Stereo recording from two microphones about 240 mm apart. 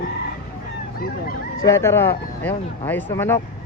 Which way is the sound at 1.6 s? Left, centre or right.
Centre.